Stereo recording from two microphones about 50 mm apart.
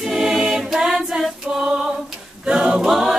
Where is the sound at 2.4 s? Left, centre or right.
Centre.